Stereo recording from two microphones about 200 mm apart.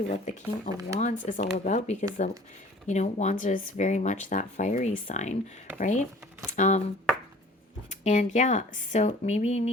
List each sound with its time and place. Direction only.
0.1 s speech: 35° left (ahead or behind)